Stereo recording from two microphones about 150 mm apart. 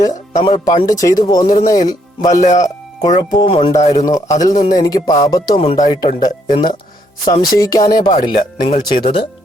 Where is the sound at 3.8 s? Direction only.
45° left (ahead or behind).